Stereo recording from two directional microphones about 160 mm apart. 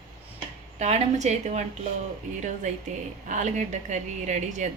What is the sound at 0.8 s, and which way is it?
Speech, 45° right (ahead or behind).